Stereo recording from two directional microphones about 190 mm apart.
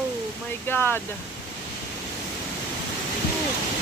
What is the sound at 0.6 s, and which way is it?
Speech, 10° left (ahead or behind).